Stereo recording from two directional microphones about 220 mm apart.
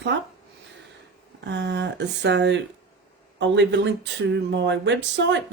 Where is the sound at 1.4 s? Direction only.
50° right (ahead or behind).